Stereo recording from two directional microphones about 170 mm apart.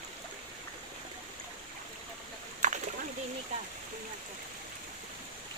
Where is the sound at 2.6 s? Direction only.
45° right (ahead or behind).